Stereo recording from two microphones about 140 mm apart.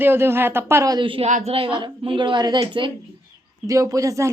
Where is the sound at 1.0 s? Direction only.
40° right (ahead or behind).